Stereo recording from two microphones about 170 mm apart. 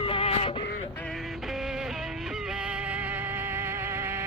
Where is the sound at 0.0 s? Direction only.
35° left (ahead or behind).